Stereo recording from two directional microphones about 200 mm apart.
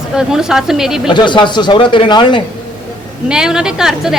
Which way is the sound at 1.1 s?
25° left (ahead or behind).